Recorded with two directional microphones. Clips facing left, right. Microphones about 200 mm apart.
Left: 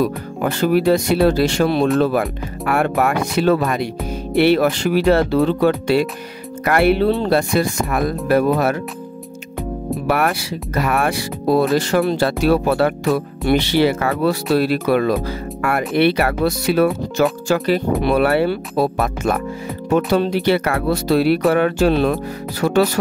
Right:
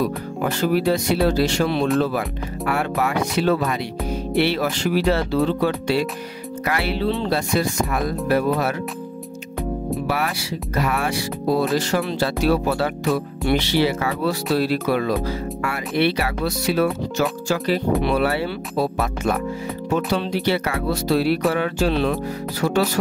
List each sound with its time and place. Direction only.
0.4 s speech: 60° left (ahead or behind)
10.0 s speech: 55° left (ahead or behind)
20.4 s speech: 55° left (ahead or behind)